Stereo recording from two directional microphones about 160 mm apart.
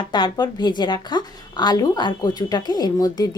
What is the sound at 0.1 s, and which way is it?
Speech, 30° left (ahead or behind).